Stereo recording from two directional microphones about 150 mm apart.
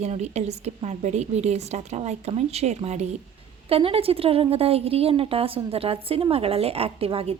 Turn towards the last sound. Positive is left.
turn(degrees=-40)  # may be behind; listen again after turning